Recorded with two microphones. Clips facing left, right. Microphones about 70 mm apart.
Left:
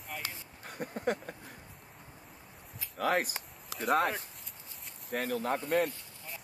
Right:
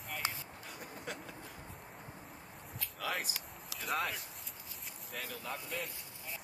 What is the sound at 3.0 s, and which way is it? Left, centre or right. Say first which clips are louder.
Speech: left 9 dB; left.